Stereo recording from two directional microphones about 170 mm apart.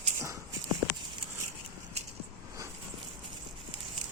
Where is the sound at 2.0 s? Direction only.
40° right (ahead or behind).